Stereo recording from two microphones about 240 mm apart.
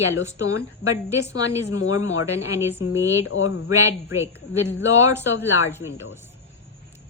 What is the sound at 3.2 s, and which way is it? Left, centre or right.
Speech, left.